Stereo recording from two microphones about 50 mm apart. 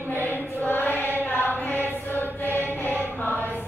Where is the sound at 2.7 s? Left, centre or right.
Left.